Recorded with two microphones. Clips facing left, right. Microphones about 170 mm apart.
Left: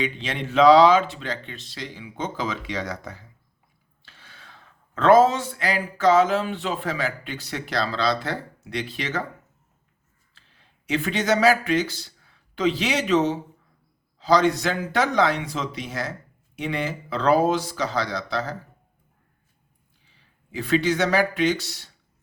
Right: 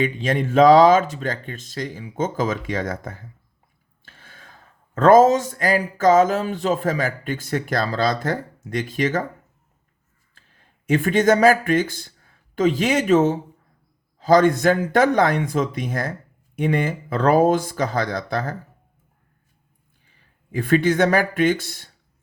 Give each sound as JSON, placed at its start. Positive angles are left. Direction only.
{"t": 0.0, "sound": "speech", "side_deg": -45}
{"t": 10.3, "sound": "speech", "side_deg": -50}
{"t": 20.1, "sound": "speech", "side_deg": -50}